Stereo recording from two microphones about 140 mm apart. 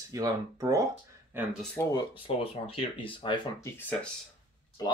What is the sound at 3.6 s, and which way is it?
Speech, 15° left (ahead or behind).